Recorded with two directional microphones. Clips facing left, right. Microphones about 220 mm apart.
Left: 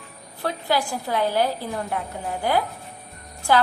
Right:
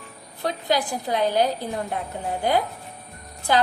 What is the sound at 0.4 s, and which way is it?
A woman's voice, 20° right (ahead or behind).